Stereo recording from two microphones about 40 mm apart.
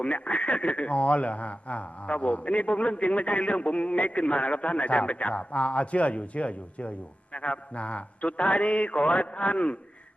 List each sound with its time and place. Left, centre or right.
0.0 s speech: left